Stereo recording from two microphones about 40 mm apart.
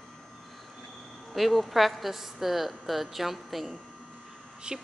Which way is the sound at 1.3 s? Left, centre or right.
Centre.